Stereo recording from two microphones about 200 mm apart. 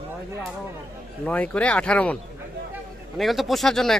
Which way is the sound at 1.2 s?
5° left (ahead or behind).